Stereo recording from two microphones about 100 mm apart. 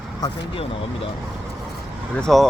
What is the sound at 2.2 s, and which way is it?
Speech, centre (ahead or behind).